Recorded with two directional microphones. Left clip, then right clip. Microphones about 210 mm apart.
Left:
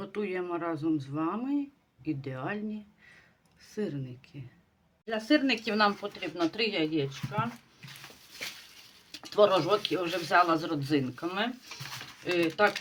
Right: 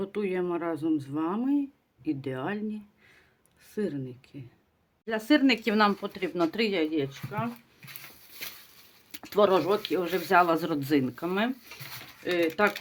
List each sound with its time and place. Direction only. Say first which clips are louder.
0.0 s speech: right 4 dB; 30° right (ahead or behind)
3.8 s speech: right 3 dB; 30° right (ahead or behind)
5.0 s speech: right 3 dB; 45° right (ahead or behind)
9.1 s speech: right 1 dB; 40° right (ahead or behind)